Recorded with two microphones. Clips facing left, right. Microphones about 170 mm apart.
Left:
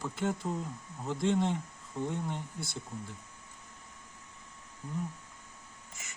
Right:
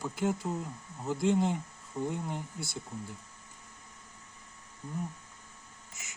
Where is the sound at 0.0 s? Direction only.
5° right (ahead or behind).